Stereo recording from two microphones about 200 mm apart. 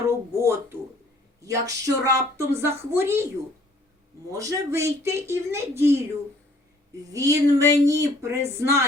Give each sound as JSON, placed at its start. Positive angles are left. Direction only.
{"t": 0.1, "sound": "music", "side_deg": -15}
{"t": 1.4, "sound": "a woman's voice", "side_deg": -15}
{"t": 4.3, "sound": "a woman's voice", "side_deg": -15}
{"t": 7.1, "sound": "a woman's voice", "side_deg": -15}